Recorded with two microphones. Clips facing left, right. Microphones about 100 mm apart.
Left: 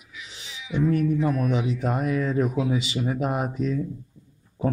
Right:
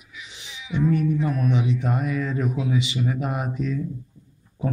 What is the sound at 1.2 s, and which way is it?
Speech, 45° left (ahead or behind).